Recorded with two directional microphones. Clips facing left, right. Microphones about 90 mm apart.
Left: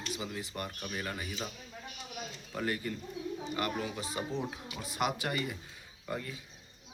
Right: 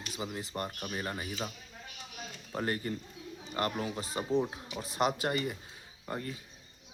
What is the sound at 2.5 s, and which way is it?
Speech, 35° right (ahead or behind).